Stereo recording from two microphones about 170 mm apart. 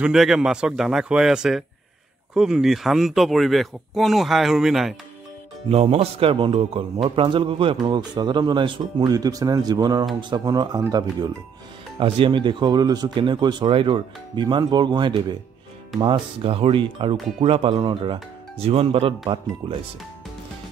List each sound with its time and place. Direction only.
0.0 s speech: 5° right (ahead or behind)
5.7 s speech: 35° right (ahead or behind)